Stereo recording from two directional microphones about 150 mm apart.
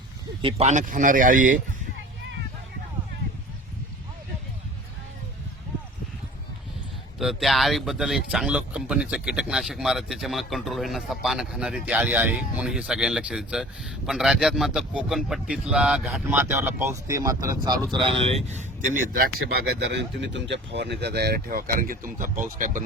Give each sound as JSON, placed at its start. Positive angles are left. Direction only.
{"t": 0.4, "sound": "speech", "side_deg": -50}
{"t": 7.2, "sound": "speech", "side_deg": 0}
{"t": 17.9, "sound": "speech", "side_deg": -35}
{"t": 21.0, "sound": "speech", "side_deg": -90}